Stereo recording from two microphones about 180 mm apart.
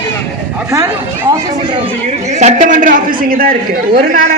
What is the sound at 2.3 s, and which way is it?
A woman's voice, 45° right (ahead or behind).